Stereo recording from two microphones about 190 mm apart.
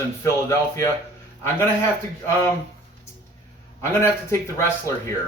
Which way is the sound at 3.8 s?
15° left (ahead or behind).